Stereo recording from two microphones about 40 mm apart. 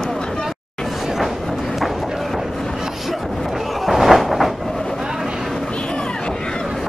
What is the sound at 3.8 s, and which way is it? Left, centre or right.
Train, centre.